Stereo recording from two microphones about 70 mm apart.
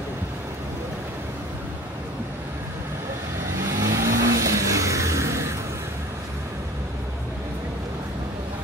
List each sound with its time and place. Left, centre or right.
3.8 s vehicle: right